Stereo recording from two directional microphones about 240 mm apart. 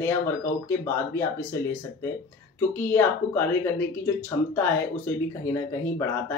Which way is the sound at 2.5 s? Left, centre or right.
Centre.